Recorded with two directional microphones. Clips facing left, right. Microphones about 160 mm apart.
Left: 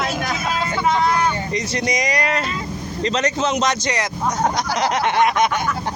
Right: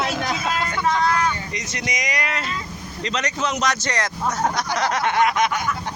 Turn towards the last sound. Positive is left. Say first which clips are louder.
# left 2 dB
turn(degrees=25)  # may be behind; listen again after turning